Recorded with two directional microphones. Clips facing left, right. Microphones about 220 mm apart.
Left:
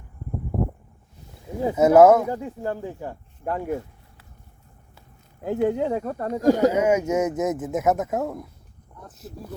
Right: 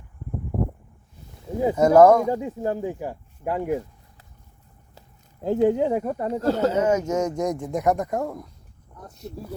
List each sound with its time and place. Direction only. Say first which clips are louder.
1.7 s speech: left 1 dB; 5° left (ahead or behind)
2.3 s speech: right 3 dB; 20° right (ahead or behind)
5.4 s speech: right 3 dB; 20° right (ahead or behind)
6.3 s speech: left 4 dB; 15° left (ahead or behind)